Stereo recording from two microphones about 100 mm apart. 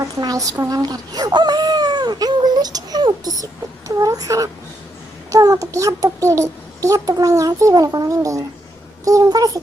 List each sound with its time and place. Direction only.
0.2 s a child's voice: 35° right (ahead or behind)